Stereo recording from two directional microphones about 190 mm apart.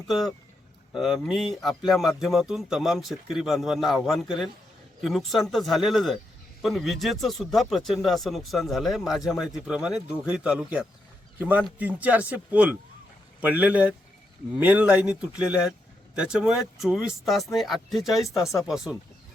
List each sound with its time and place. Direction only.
0.9 s speech: centre (ahead or behind)